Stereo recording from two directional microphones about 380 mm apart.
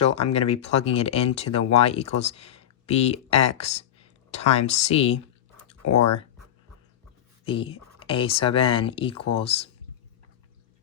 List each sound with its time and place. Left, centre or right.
0.0 s speech: centre
5.8 s speech: left
7.4 s speech: centre